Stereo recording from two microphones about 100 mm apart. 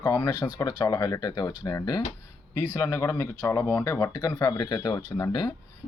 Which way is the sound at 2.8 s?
30° left (ahead or behind).